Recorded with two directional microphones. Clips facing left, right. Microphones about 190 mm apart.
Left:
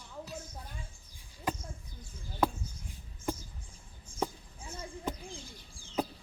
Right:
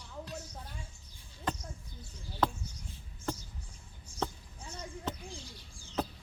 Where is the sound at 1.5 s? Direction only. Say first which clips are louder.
Left 1 dB; 10° left (ahead or behind).